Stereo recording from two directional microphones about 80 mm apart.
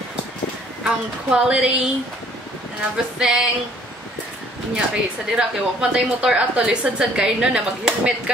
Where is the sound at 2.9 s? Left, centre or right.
Centre.